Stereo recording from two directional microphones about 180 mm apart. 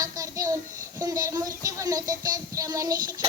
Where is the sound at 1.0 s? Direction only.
20° right (ahead or behind).